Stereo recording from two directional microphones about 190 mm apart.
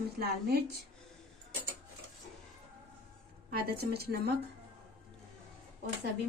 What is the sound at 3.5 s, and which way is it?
Speech, 55° right (ahead or behind).